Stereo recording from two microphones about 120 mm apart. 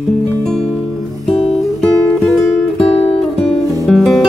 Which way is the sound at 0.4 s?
5° left (ahead or behind).